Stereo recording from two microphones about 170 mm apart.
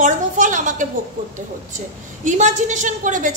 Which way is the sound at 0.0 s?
50° right (ahead or behind).